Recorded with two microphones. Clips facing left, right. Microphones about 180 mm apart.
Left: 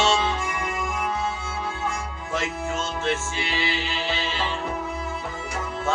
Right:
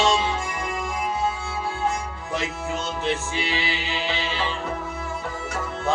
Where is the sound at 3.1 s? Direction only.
15° right (ahead or behind).